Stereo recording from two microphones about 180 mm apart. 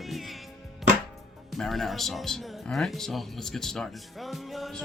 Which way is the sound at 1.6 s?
Centre (ahead or behind).